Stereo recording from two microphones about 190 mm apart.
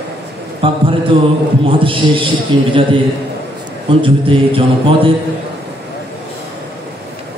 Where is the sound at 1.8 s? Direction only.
25° right (ahead or behind).